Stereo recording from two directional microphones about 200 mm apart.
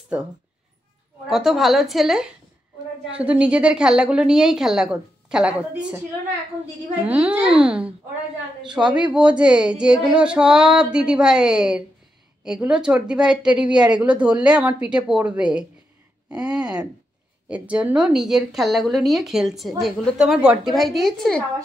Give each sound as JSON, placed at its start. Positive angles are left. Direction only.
{"t": 1.2, "sound": "speech", "side_deg": 0}
{"t": 7.0, "sound": "speech", "side_deg": -5}